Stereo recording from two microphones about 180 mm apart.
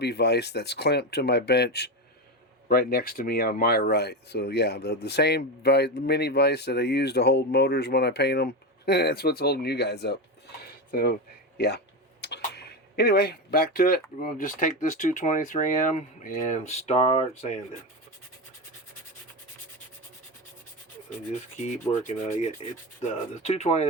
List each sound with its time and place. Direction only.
0.0 s speech: 65° left (ahead or behind)
2.6 s speech: 55° left (ahead or behind)
10.6 s a sound: 60° left (ahead or behind)
12.2 s speech: 70° left (ahead or behind); by 17.2 s 40° left (ahead or behind)
21.1 s speech: 45° left (ahead or behind)